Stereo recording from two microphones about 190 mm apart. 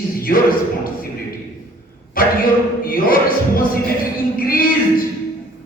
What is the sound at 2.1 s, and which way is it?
Speech, 50° left (ahead or behind).